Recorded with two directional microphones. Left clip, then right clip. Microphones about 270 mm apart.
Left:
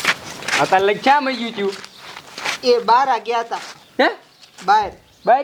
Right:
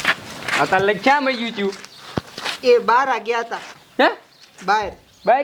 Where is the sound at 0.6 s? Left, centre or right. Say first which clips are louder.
Left 2 dB; left.